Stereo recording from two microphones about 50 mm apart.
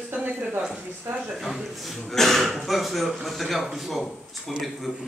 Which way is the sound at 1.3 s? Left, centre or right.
Centre.